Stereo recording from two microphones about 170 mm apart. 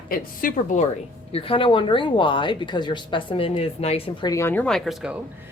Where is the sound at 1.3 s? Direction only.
35° left (ahead or behind).